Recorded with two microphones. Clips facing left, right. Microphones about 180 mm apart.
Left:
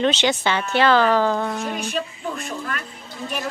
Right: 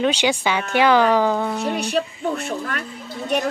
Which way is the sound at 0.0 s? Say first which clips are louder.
Even; 10° right (ahead or behind).